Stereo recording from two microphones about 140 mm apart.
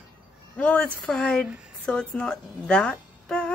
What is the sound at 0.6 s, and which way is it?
A woman's voice, 10° left (ahead or behind).